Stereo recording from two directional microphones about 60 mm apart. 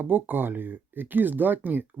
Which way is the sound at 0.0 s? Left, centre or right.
Right.